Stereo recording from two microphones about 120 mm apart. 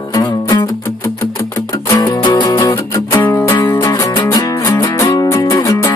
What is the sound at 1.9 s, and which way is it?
Music, 35° left (ahead or behind).